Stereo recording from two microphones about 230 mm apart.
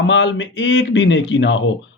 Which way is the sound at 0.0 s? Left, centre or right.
Left.